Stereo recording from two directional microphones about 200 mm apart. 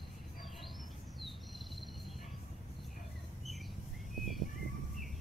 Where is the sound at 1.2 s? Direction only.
Centre (ahead or behind).